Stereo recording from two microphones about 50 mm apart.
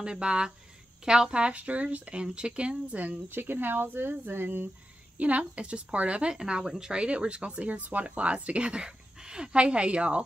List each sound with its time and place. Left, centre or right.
0.0 s speech: centre
3.3 s speech: right
5.1 s speech: right